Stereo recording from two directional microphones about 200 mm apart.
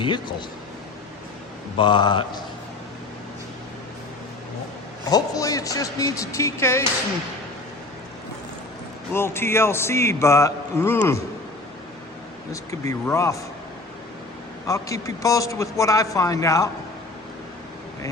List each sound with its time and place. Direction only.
0.0 s speech: 25° left (ahead or behind)
1.8 s speech: 20° left (ahead or behind)
5.0 s speech: 20° left (ahead or behind)
9.1 s speech: 10° left (ahead or behind)
12.9 s speech: 15° left (ahead or behind)
14.7 s speech: 15° left (ahead or behind)